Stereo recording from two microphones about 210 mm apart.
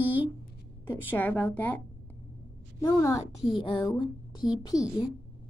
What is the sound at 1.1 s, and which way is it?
Speech, 10° left (ahead or behind).